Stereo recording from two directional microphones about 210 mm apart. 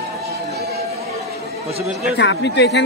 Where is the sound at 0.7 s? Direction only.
30° right (ahead or behind).